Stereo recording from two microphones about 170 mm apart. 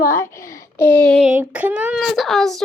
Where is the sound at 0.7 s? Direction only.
10° left (ahead or behind).